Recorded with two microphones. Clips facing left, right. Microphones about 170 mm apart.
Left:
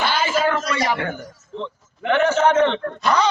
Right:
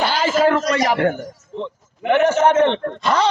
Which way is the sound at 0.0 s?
35° right (ahead or behind).